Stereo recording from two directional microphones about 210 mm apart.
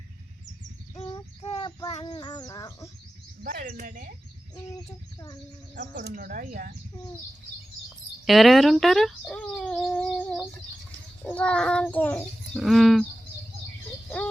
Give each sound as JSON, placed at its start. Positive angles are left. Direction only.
{"t": 0.9, "sound": "a sound", "side_deg": 25}
{"t": 2.0, "sound": "speech", "side_deg": 20}
{"t": 3.4, "sound": "speech", "side_deg": -40}
{"t": 5.7, "sound": "speech", "side_deg": -35}
{"t": 8.2, "sound": "bird", "side_deg": 0}
{"t": 11.2, "sound": "child singing", "side_deg": 5}